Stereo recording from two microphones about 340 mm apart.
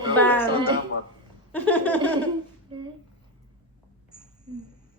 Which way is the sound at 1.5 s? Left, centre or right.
Centre.